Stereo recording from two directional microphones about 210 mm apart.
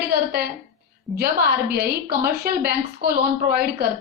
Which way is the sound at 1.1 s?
50° right (ahead or behind).